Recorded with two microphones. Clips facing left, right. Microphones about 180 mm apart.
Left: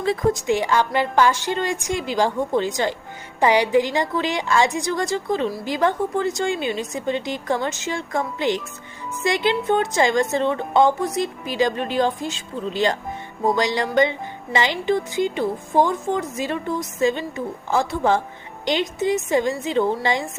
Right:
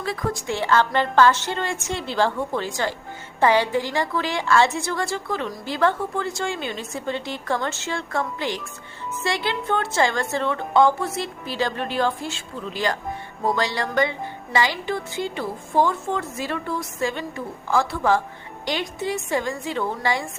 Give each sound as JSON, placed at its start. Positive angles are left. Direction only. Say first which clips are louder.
{"t": 0.0, "sound": "a woman's voice", "louder": "left 6 dB", "side_deg": 25}